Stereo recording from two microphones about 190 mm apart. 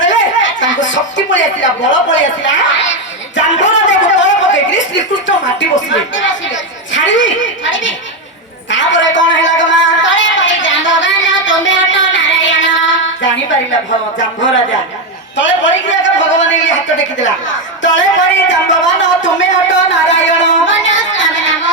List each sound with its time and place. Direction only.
0.0 s a sound: 75° left (ahead or behind)
1.8 s speech: 75° left (ahead or behind)
3.3 s music: 75° left (ahead or behind)
4.1 s a woman's voice: 75° left (ahead or behind)
8.7 s a sound: 75° left (ahead or behind)
15.4 s speech: 75° left (ahead or behind)
17.8 s speech: 75° left (ahead or behind)
20.7 s child singing: 75° left (ahead or behind)